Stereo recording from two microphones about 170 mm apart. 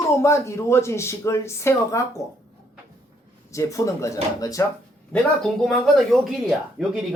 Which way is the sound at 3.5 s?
15° left (ahead or behind).